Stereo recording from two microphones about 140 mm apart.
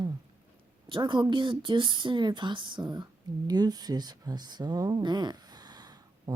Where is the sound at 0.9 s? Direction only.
35° right (ahead or behind).